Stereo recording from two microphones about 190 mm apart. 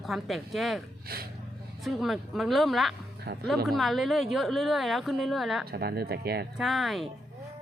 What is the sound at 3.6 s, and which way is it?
A woman's voice, centre (ahead or behind).